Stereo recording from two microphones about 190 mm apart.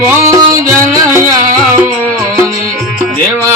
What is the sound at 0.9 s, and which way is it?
Music, 15° right (ahead or behind).